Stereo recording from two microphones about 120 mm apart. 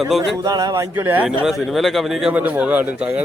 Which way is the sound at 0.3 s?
30° right (ahead or behind).